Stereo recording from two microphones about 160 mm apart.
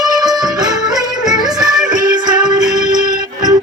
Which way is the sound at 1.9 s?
25° right (ahead or behind).